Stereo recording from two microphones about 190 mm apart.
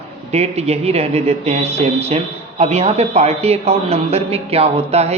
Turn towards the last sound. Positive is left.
turn(degrees=-35)  # may be behind; listen again after turning